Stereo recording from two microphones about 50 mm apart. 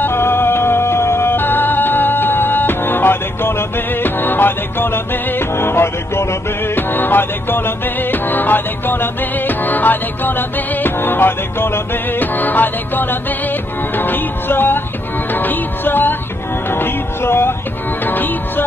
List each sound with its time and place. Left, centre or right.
0.0 s music: left
6.7 s music: left
18.0 s music: left